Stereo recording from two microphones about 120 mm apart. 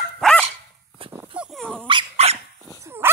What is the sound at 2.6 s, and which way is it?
Dog, 20° right (ahead or behind).